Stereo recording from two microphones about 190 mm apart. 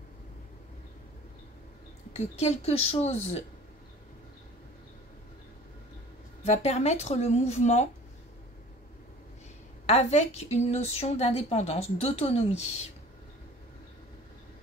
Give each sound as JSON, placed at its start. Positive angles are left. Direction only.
{"t": 2.1, "sound": "a woman's voice", "side_deg": 35}
{"t": 6.4, "sound": "a woman's voice", "side_deg": 35}
{"t": 9.8, "sound": "a woman's voice", "side_deg": 35}